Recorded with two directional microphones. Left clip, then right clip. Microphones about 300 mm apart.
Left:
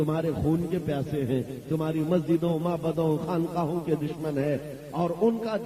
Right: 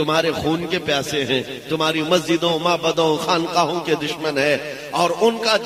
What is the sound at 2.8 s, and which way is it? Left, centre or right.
Speech, right.